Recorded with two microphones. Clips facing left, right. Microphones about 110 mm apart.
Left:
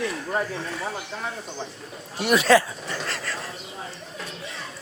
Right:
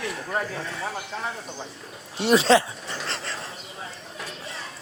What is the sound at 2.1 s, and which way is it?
Speech, 30° right (ahead or behind).